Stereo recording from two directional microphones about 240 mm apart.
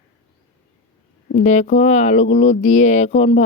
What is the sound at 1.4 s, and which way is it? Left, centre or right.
Speech, left.